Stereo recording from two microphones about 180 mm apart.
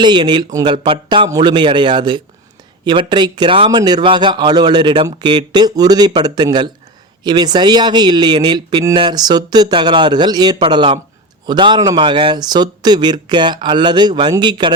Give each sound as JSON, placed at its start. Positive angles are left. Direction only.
{"t": 0.0, "sound": "a man's voice", "side_deg": -25}